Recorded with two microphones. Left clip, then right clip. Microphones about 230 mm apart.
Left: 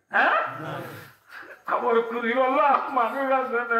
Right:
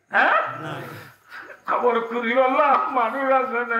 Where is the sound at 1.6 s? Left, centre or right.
Right.